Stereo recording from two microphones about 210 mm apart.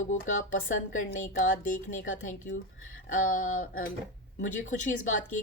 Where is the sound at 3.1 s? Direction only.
40° left (ahead or behind).